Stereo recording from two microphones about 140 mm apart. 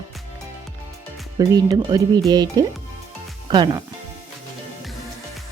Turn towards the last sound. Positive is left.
turn(degrees=-35)  # may be behind; listen again after turning